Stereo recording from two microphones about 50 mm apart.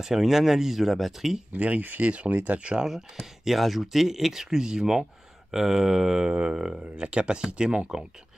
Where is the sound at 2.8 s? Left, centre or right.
Centre.